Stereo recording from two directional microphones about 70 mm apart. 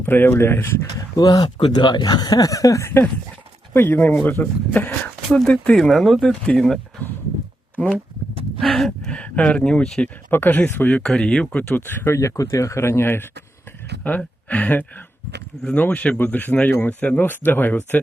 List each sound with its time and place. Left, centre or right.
0.0 s speech: left
1.1 s speech: left
3.8 s speech: left; by 6.6 s centre
8.6 s gasp: centre
9.0 s speech: centre
10.3 s speech: left
10.9 s speech: centre
11.7 s speech: left
14.0 s speech: left